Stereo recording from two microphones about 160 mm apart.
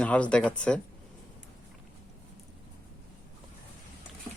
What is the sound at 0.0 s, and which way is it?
Speech, 5° left (ahead or behind).